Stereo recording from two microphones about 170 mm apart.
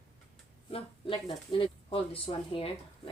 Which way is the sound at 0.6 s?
35° left (ahead or behind).